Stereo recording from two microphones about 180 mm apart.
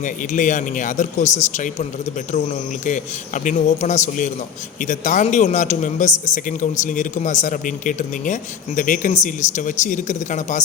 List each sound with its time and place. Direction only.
0.0 s speech: 45° left (ahead or behind)